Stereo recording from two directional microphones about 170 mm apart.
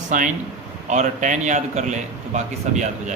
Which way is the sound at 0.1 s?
45° right (ahead or behind).